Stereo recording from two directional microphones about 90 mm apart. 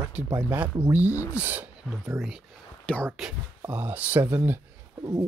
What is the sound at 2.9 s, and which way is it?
Speech, 10° left (ahead or behind).